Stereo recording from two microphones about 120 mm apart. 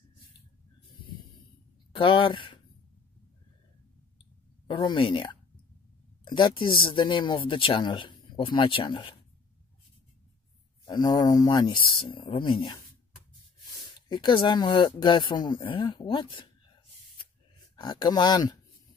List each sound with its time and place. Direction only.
1.9 s speech: 45° left (ahead or behind)
4.6 s speech: 40° left (ahead or behind)
10.9 s speech: 35° left (ahead or behind)
13.9 s speech: 40° left (ahead or behind)
17.7 s speech: 35° left (ahead or behind)